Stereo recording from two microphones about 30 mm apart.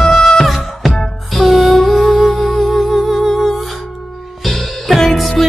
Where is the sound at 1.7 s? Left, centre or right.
Centre.